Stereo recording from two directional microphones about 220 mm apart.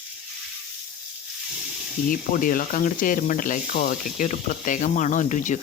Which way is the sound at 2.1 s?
40° left (ahead or behind).